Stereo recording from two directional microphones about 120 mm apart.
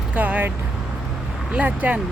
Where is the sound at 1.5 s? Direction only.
10° right (ahead or behind).